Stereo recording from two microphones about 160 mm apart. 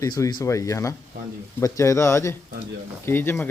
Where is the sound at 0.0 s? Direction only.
25° left (ahead or behind).